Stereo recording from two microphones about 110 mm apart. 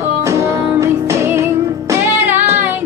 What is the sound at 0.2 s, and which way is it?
Music, 25° right (ahead or behind).